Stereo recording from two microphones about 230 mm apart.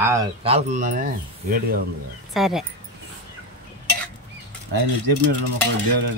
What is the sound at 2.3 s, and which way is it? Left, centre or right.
Speech, centre.